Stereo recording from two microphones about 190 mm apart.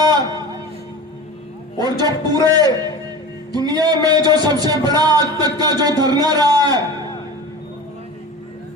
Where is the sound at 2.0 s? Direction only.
20° right (ahead or behind).